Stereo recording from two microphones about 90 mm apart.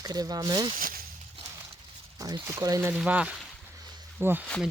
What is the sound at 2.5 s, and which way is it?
Speech, 40° right (ahead or behind).